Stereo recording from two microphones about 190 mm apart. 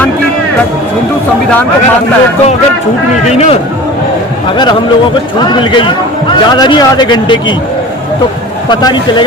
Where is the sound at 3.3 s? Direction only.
35° left (ahead or behind).